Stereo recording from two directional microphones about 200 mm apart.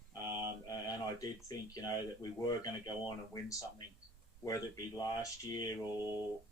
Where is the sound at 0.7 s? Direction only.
20° left (ahead or behind).